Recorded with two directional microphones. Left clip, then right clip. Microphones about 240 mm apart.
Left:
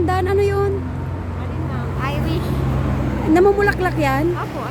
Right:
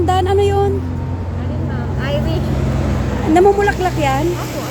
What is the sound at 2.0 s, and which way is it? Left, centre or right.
Vehicle, left.